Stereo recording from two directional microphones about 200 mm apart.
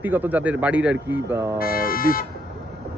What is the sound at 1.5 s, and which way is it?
Speech, 45° left (ahead or behind).